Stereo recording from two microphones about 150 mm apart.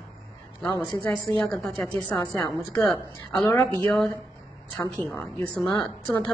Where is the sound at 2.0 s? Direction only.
25° left (ahead or behind).